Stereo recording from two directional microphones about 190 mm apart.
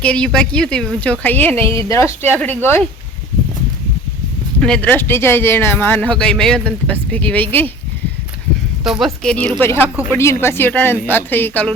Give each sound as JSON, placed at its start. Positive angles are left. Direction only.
{"t": 0.0, "sound": "speech", "side_deg": 5}
{"t": 4.6, "sound": "speech", "side_deg": 5}
{"t": 8.8, "sound": "speech", "side_deg": 0}